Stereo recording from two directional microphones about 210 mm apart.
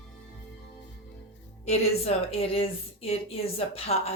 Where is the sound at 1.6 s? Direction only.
30° left (ahead or behind).